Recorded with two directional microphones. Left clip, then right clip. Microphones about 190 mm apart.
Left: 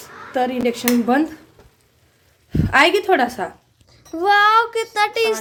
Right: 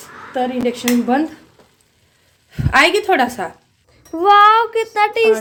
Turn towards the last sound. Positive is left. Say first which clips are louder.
# right 4 dB
turn(degrees=-5)  # may be behind; listen again after turning